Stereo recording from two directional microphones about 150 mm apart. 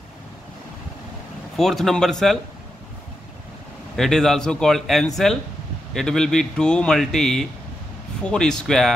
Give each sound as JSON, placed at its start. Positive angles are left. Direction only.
{"t": 1.6, "sound": "a man's voice", "side_deg": 0}
{"t": 3.9, "sound": "a man's voice", "side_deg": 5}